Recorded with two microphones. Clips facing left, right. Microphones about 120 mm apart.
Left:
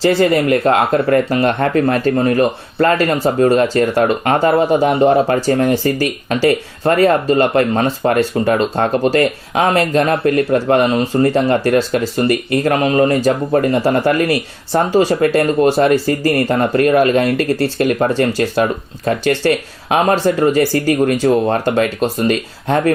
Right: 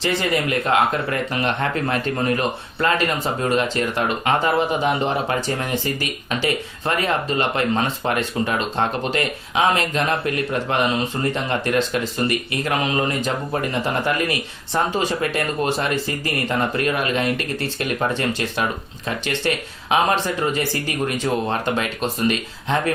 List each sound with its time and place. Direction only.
0.0 s speech: 40° left (ahead or behind)